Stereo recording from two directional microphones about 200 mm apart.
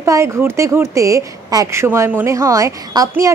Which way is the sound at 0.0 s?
15° right (ahead or behind).